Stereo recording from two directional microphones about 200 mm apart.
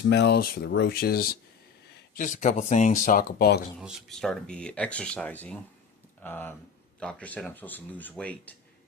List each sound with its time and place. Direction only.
0.0 s speech: 60° left (ahead or behind)
3.8 s speech: centre (ahead or behind)